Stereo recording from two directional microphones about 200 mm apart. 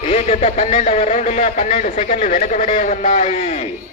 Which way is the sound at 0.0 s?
35° left (ahead or behind).